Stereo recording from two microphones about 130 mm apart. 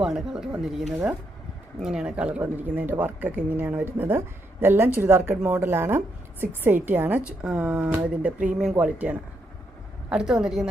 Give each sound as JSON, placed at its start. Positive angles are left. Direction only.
{"t": 0.0, "sound": "a woman's voice", "side_deg": -5}